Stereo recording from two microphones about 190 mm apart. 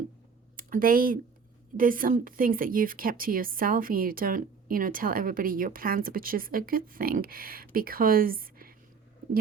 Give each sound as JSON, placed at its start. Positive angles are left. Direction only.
{"t": 0.5, "sound": "a woman's voice", "side_deg": -50}